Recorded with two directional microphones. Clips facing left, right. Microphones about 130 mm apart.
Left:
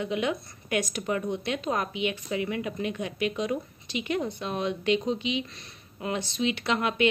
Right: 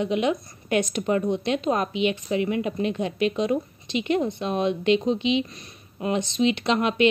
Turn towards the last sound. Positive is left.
turn(degrees=-25)  # may be behind; listen again after turning